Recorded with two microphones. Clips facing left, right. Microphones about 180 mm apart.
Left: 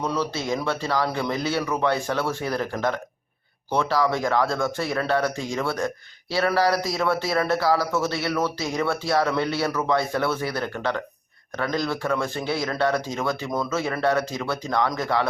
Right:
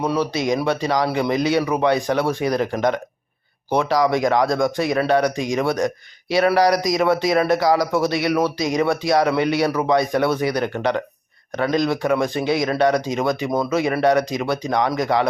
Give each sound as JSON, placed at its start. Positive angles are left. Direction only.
{"t": 0.0, "sound": "speech", "side_deg": -15}